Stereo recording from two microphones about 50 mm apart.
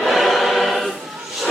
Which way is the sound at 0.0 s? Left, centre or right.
Centre.